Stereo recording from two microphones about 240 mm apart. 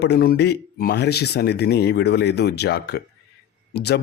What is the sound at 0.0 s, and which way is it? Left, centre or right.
Speech, left.